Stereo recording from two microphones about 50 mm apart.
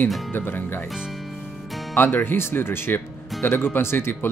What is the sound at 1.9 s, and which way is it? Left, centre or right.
Speech, left.